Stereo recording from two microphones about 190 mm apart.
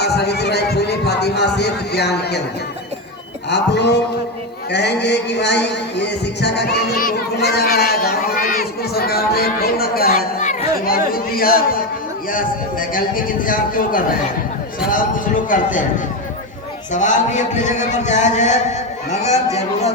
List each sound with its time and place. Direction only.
0.0 s heart sounds: 60° left (ahead or behind)
3.5 s speech: 65° left (ahead or behind)
10.1 s speech: 40° left (ahead or behind)
15.4 s speech: 45° left (ahead or behind)
16.9 s speech: 40° left (ahead or behind)